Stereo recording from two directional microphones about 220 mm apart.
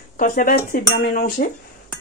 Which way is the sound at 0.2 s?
40° left (ahead or behind).